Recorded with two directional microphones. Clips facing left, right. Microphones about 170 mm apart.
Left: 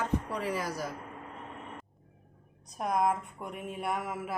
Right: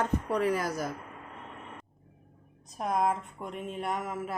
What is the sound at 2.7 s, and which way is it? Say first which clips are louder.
Speech: even; 5° left (ahead or behind).